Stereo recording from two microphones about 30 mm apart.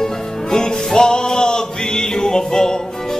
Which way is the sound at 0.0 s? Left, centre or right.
Left.